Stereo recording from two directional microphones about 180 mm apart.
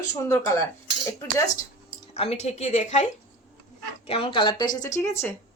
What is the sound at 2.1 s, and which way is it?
A woman's voice, 35° left (ahead or behind).